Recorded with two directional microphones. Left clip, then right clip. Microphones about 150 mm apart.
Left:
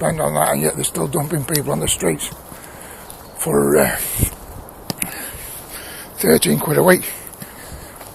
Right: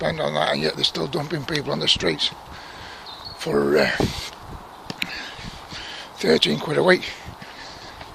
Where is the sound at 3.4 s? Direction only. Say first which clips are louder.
Left 4 dB; 30° right (ahead or behind).